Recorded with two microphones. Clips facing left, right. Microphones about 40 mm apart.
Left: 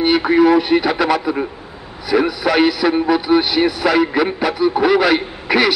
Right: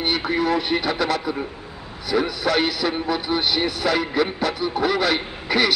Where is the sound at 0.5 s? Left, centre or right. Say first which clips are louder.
Left 8 dB; centre.